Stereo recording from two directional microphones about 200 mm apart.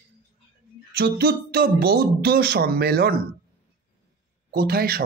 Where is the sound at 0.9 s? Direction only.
55° right (ahead or behind).